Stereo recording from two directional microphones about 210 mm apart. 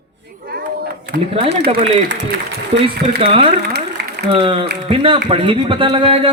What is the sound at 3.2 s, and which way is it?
Speech, 25° right (ahead or behind).